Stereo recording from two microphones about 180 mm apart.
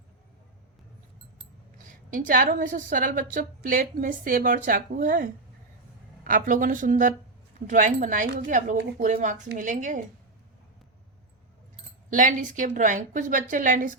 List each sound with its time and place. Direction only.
1.9 s a woman's voice: 45° right (ahead or behind)
12.1 s a woman's voice: 45° right (ahead or behind)